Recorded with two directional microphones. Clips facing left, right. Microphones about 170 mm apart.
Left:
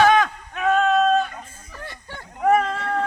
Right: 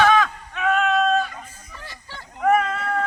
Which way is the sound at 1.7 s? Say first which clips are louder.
Left 4 dB; 55° left (ahead or behind).